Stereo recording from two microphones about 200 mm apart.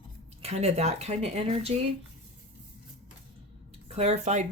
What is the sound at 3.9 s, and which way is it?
Speech, 30° right (ahead or behind).